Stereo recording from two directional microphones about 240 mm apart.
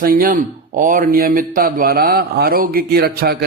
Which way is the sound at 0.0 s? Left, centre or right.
Right.